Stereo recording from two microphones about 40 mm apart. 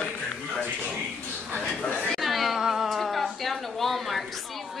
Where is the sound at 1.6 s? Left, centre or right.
Left.